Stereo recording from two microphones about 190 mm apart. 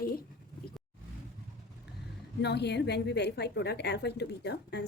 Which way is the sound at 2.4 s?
60° left (ahead or behind).